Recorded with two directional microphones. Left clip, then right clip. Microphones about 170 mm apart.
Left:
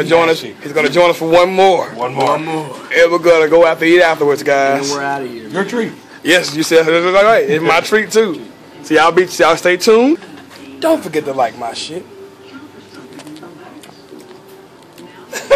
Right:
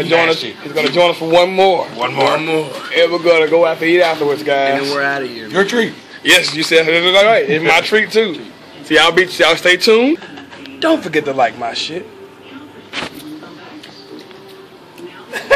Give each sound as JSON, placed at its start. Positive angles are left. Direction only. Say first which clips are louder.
{"t": 0.0, "sound": "speech", "louder": "left 1 dB", "side_deg": 25}
{"t": 2.0, "sound": "speech", "louder": "right 1 dB", "side_deg": 5}
{"t": 2.9, "sound": "speech", "louder": "left 3 dB", "side_deg": 20}
{"t": 5.0, "sound": "speech", "louder": "right 2 dB", "side_deg": 45}
{"t": 5.5, "sound": "speech", "louder": "right 5 dB", "side_deg": -20}
{"t": 6.5, "sound": "a man's voice", "louder": "left 1 dB", "side_deg": 20}
{"t": 10.8, "sound": "speech", "louder": "even", "side_deg": 5}